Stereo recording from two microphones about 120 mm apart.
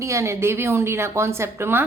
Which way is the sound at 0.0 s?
25° right (ahead or behind).